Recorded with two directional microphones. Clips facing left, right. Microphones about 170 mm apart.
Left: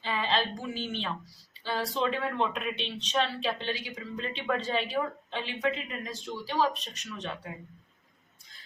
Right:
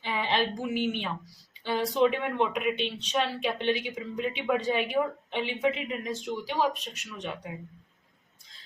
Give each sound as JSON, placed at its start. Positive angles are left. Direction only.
{"t": 0.0, "sound": "a woman's voice", "side_deg": -15}